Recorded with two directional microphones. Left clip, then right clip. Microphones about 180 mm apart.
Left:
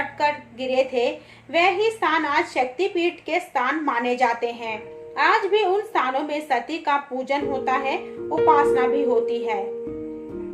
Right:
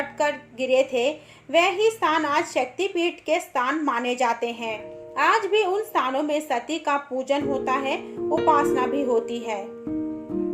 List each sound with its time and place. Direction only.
0.2 s a woman's voice: 55° right (ahead or behind)